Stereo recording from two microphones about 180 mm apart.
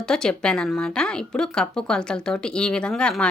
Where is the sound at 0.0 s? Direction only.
5° left (ahead or behind).